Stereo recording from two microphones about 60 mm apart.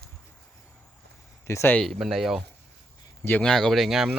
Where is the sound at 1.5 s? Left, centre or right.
Left.